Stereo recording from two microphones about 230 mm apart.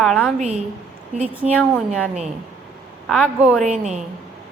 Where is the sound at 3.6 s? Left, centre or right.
Right.